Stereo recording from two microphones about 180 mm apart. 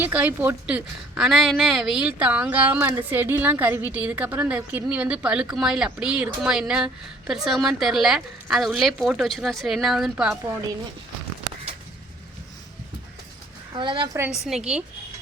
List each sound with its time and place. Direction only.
0.0 s a woman's voice: 10° right (ahead or behind)
13.7 s a woman's voice: 25° right (ahead or behind)
14.4 s a woman's voice: 5° right (ahead or behind)